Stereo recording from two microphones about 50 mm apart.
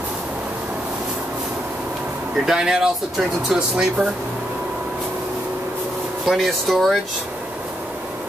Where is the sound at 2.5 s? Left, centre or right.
Centre.